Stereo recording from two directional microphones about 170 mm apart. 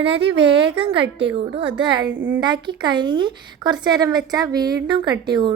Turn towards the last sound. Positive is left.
turn(degrees=-25)  # may be behind; listen again after turning